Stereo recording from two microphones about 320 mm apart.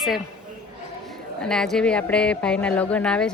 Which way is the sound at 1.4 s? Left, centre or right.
Centre.